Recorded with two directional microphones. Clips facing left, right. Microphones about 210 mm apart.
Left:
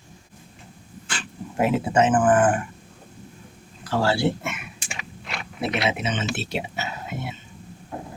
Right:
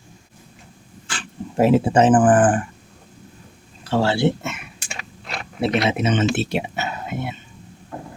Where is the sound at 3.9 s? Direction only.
25° right (ahead or behind).